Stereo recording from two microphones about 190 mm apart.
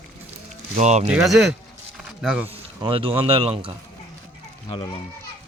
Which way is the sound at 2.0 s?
5° right (ahead or behind).